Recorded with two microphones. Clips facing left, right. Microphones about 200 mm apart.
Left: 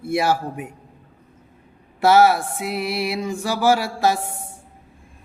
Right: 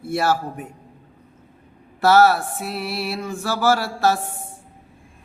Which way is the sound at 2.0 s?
15° left (ahead or behind).